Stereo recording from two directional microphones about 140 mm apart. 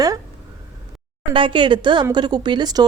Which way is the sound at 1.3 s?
35° right (ahead or behind).